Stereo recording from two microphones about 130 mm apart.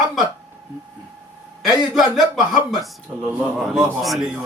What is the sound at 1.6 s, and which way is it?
Speech, centre (ahead or behind).